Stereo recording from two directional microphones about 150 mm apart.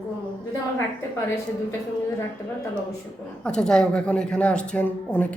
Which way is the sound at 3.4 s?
5° left (ahead or behind).